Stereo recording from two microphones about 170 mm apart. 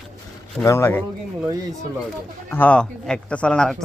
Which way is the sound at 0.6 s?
15° left (ahead or behind).